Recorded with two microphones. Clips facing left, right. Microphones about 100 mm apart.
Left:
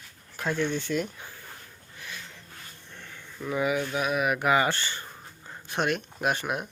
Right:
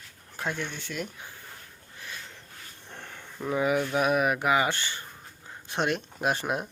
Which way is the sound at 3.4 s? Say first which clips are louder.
Right 1 dB; 25° right (ahead or behind).